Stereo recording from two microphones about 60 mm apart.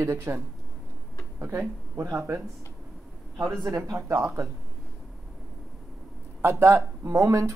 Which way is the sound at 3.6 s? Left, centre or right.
Right.